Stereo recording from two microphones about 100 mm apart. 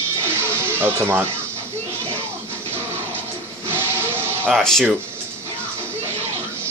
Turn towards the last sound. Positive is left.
turn(degrees=5)  # may be behind; listen again after turning